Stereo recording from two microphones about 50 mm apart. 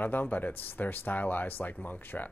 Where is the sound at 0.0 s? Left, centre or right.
Left.